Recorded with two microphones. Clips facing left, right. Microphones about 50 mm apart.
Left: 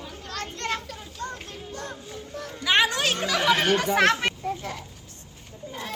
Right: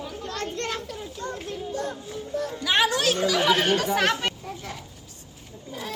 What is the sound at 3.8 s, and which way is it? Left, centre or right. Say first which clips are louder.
Speech: left 1 dB; left.